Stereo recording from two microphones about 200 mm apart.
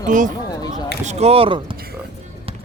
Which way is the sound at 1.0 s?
30° right (ahead or behind).